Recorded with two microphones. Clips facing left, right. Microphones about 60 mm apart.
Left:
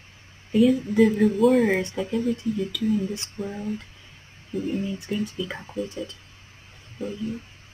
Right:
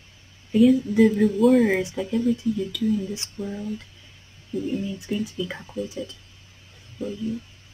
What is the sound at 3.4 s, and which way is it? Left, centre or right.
Speech, left.